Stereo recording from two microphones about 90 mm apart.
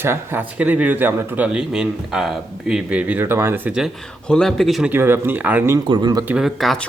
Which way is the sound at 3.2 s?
25° right (ahead or behind).